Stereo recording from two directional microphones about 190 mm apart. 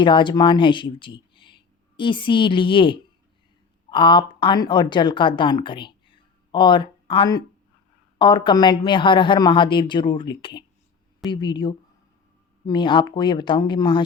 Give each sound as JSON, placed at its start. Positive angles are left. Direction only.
{"t": 0.0, "sound": "speech", "side_deg": 25}